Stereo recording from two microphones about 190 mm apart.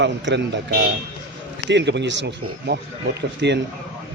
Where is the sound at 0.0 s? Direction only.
70° right (ahead or behind).